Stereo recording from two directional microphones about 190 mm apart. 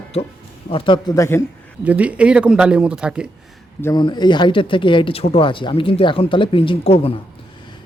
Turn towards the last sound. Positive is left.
turn(degrees=30)  # may be behind; listen again after turning